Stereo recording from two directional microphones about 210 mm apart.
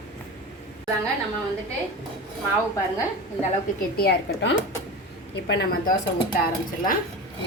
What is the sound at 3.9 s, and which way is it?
A woman's voice, 50° left (ahead or behind).